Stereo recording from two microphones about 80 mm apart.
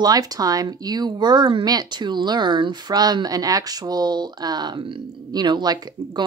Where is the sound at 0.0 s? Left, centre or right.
Right.